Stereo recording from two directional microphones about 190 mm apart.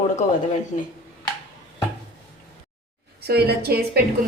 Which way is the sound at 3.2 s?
55° right (ahead or behind).